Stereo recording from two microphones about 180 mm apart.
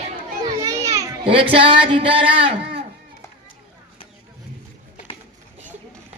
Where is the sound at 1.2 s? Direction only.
30° right (ahead or behind).